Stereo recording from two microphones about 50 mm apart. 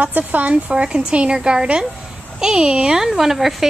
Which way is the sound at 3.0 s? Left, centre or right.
Centre.